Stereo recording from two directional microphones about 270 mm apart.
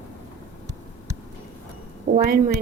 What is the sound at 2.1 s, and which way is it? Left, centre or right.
Speech, right.